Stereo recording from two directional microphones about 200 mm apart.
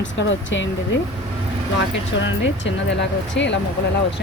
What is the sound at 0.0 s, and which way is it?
Speech, 65° left (ahead or behind).